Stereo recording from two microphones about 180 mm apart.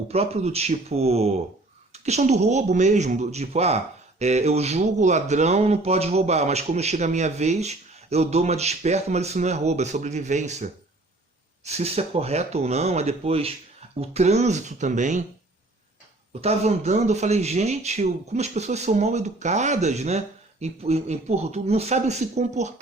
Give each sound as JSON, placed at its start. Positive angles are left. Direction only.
{"t": 0.1, "sound": "speech", "side_deg": -35}
{"t": 16.4, "sound": "speech", "side_deg": -35}